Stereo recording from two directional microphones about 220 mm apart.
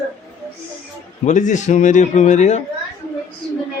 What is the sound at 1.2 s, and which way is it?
A child's voice, 35° left (ahead or behind).